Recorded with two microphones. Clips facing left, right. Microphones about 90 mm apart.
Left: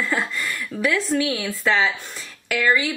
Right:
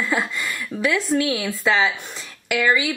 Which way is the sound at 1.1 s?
10° right (ahead or behind).